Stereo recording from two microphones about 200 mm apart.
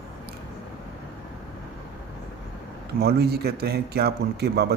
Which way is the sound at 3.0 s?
55° right (ahead or behind).